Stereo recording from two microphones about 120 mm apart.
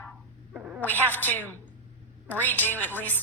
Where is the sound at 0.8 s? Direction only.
15° left (ahead or behind).